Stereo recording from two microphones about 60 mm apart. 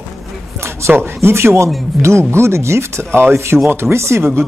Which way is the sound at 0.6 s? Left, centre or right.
Right.